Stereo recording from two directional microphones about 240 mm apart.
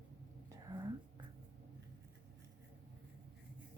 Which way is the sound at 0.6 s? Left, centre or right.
Centre.